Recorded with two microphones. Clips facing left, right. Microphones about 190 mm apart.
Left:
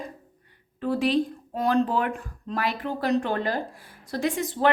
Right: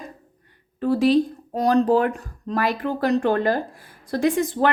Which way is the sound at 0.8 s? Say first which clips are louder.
Right 6 dB; 40° right (ahead or behind).